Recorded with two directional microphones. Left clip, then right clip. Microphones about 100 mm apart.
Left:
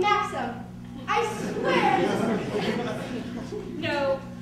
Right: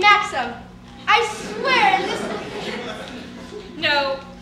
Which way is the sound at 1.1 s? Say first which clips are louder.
Right 9 dB; 30° right (ahead or behind).